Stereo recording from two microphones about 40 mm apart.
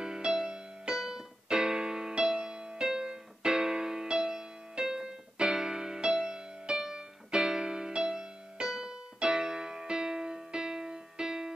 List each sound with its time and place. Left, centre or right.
0.0 s music: centre